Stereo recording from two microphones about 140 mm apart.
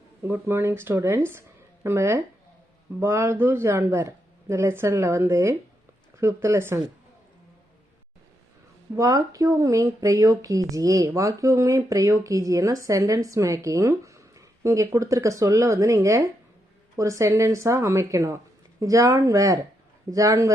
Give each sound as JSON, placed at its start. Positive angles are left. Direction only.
{"t": 0.2, "sound": "speech", "side_deg": -15}
{"t": 9.0, "sound": "speech", "side_deg": -25}